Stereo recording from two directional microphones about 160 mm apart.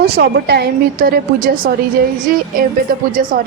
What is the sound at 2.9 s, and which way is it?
Speech, 65° right (ahead or behind).